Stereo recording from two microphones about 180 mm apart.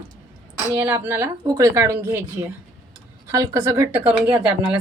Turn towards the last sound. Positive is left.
turn(degrees=-5)  # may be behind; listen again after turning